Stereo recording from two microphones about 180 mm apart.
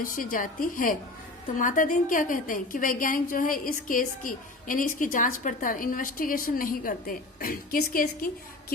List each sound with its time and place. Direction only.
0.0 s a woman's voice: 50° left (ahead or behind)